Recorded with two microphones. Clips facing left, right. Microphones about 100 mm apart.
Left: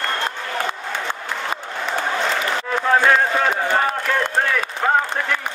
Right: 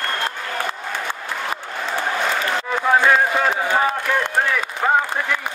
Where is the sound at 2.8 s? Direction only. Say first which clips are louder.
Even; 10° right (ahead or behind).